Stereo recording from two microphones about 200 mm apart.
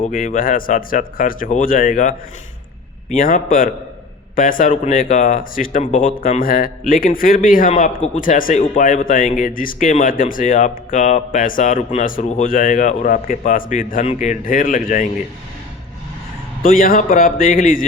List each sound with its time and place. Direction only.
0.0 s speech: 40° left (ahead or behind)
7.7 s speech: 30° left (ahead or behind)
8.2 s speech: 45° left (ahead or behind)
16.6 s speech: 45° left (ahead or behind)